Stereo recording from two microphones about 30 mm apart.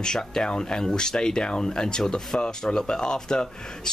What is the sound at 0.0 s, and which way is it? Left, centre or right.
Speech, left.